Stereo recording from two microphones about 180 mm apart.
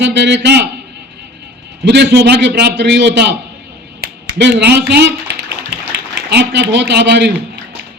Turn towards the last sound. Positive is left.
turn(degrees=-70)  # may be behind; listen again after turning